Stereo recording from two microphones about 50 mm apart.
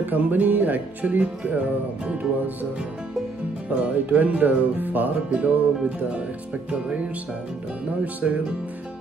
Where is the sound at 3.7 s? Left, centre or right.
Right.